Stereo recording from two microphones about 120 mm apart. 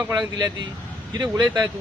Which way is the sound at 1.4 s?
35° right (ahead or behind).